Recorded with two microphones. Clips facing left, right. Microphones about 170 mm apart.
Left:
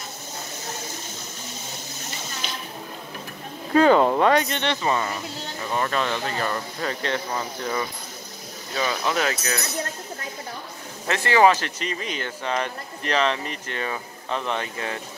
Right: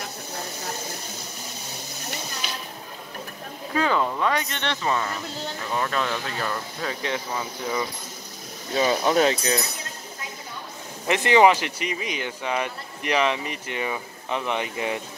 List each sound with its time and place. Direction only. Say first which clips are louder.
3.7 s a sound: left 7 dB; 50° left (ahead or behind)
4.6 s speech: left 2 dB; 10° left (ahead or behind); by 7.8 s 10° right (ahead or behind)
8.7 s chink: right 5 dB; 30° right (ahead or behind)
11.1 s speech: right 1 dB; 20° right (ahead or behind)